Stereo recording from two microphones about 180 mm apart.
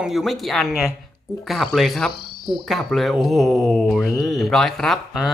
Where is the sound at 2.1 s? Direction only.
55° left (ahead or behind).